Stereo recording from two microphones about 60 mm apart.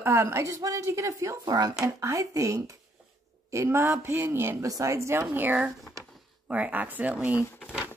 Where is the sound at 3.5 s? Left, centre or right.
Right.